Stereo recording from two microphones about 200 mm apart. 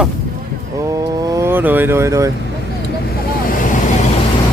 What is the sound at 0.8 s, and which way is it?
Vehicle, 15° right (ahead or behind).